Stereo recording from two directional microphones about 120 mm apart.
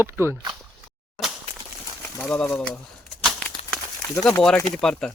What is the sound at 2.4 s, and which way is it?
Speech, 10° left (ahead or behind).